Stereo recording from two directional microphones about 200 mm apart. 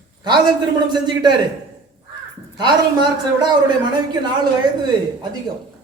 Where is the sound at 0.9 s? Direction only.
20° right (ahead or behind).